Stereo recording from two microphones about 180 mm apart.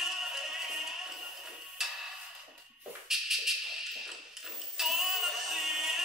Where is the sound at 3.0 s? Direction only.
Centre (ahead or behind).